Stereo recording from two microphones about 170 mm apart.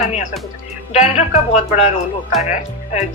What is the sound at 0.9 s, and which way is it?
A woman's voice, 40° left (ahead or behind).